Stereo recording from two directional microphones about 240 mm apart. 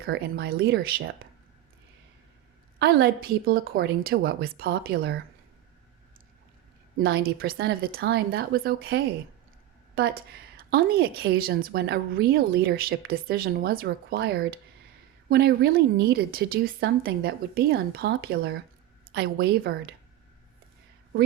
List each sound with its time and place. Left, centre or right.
0.0 s a woman's voice: right
2.7 s a woman's voice: right
6.9 s a woman's voice: right